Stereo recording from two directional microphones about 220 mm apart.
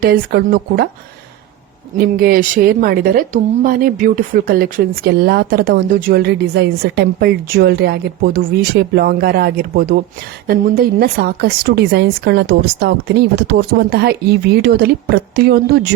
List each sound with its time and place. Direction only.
0.0 s a woman's voice: 45° right (ahead or behind)
2.0 s a woman's voice: 45° right (ahead or behind)